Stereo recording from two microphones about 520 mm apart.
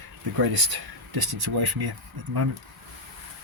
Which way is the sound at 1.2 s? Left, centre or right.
Right.